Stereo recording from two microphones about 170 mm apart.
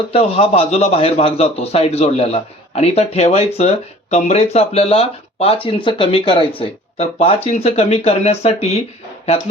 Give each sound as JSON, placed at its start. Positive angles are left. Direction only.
{"t": 0.1, "sound": "a man's voice", "side_deg": 35}